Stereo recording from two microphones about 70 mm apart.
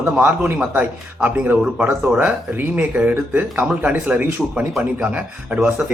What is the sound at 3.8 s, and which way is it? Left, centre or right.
Speech, centre.